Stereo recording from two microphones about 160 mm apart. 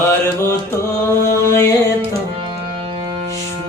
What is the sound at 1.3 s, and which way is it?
Mantra, 20° left (ahead or behind).